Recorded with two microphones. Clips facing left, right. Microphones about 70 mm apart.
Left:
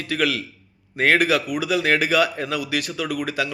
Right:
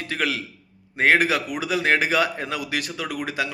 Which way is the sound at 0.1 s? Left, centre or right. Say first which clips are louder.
Left 4 dB; right.